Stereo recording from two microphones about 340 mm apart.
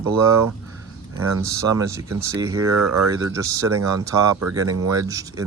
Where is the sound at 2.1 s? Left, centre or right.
Right.